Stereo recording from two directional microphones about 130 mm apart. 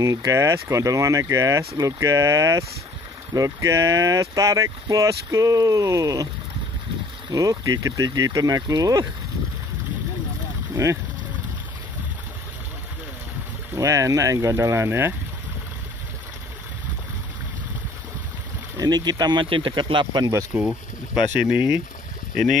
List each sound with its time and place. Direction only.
0.0 s speech: 25° right (ahead or behind)
7.3 s speech: 25° right (ahead or behind)
10.7 s speech: 20° right (ahead or behind)
13.7 s speech: 25° right (ahead or behind)
18.8 s speech: 30° right (ahead or behind)
20.5 s speech: 5° right (ahead or behind)